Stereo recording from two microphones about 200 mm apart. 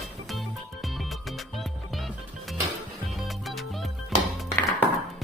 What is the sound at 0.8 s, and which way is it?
Music, centre (ahead or behind).